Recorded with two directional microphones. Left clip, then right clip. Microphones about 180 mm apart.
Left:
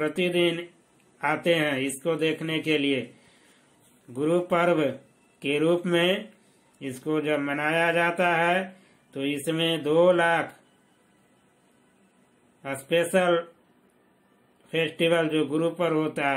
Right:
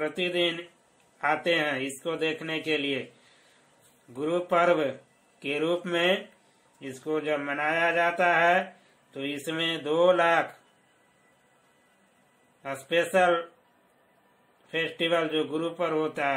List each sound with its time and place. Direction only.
0.0 s speech: 20° left (ahead or behind)
4.1 s speech: 15° left (ahead or behind)
12.6 s speech: 15° left (ahead or behind)
14.7 s speech: 15° left (ahead or behind)